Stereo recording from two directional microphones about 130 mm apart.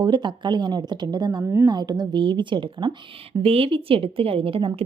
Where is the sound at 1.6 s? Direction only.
30° right (ahead or behind).